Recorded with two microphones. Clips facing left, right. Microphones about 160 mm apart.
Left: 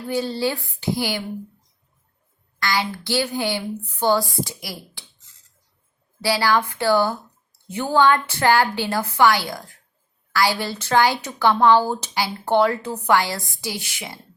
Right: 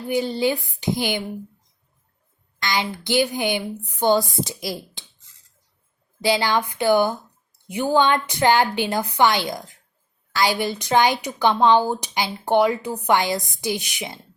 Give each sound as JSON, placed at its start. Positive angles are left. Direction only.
{"t": 0.1, "sound": "a woman's voice", "side_deg": -15}
{"t": 2.6, "sound": "speech", "side_deg": -20}
{"t": 6.2, "sound": "a woman's voice", "side_deg": -20}